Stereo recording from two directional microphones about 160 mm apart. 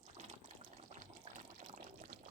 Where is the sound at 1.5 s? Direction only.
55° right (ahead or behind).